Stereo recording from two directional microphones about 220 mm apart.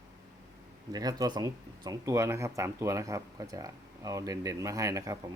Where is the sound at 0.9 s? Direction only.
15° right (ahead or behind).